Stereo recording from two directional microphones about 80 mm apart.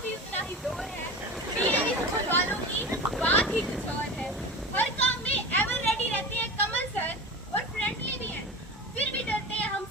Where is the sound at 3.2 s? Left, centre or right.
Centre.